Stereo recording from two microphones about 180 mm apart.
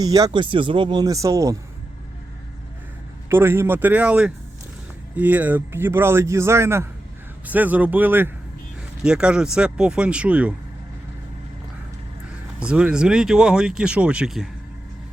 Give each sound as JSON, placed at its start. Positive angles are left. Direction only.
{"t": 0.0, "sound": "speech", "side_deg": -20}
{"t": 3.2, "sound": "a man's voice", "side_deg": -15}
{"t": 12.5, "sound": "speech", "side_deg": -5}